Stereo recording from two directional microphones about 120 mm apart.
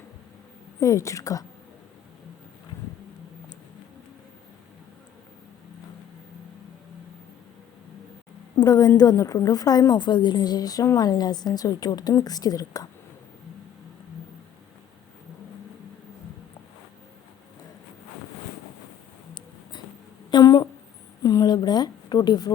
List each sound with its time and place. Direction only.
0.8 s a woman's voice: 25° left (ahead or behind)
8.6 s a woman's voice: 30° left (ahead or behind)
20.3 s a sound: 35° left (ahead or behind)